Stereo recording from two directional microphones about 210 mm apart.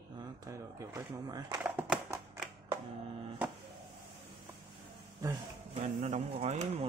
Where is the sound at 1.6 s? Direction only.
10° right (ahead or behind).